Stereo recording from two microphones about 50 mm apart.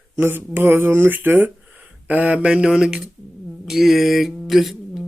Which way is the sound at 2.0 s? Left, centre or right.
Right.